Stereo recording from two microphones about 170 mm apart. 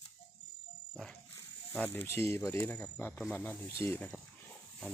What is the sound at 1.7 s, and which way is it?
Speech, 10° left (ahead or behind).